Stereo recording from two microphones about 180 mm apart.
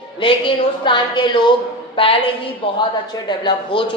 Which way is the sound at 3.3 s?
25° left (ahead or behind).